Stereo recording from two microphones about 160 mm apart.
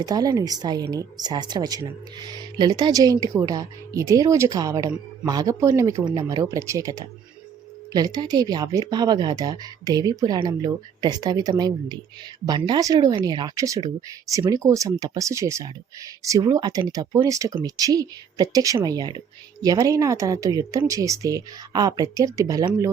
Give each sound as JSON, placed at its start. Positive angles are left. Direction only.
{"t": 0.0, "sound": "speech", "side_deg": -25}